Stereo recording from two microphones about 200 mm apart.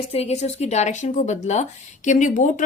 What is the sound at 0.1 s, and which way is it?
Speech, 30° left (ahead or behind).